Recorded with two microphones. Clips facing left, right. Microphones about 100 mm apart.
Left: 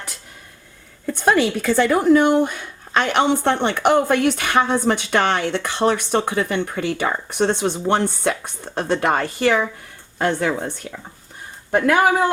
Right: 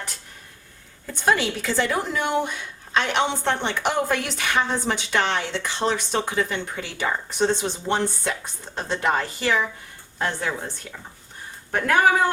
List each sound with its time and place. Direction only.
1.1 s speech: 55° left (ahead or behind)
10.2 s speech: 75° left (ahead or behind)